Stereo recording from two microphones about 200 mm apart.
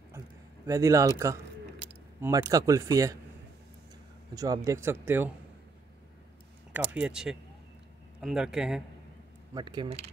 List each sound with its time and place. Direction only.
0.7 s speech: 15° right (ahead or behind)
4.4 s speech: 15° right (ahead or behind)
6.7 s speech: 5° right (ahead or behind)
9.5 s speech: 20° right (ahead or behind)
9.8 s speech: 35° right (ahead or behind)